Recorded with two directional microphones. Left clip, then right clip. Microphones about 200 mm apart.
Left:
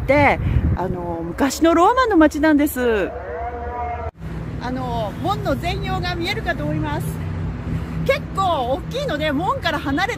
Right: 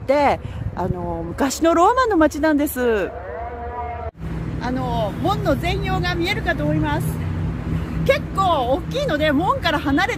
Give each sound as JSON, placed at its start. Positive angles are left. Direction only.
{"t": 0.1, "sound": "speech", "side_deg": -10}
{"t": 4.6, "sound": "speech", "side_deg": 15}
{"t": 8.0, "sound": "speech", "side_deg": 20}